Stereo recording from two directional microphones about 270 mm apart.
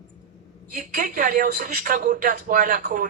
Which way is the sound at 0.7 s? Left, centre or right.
Right.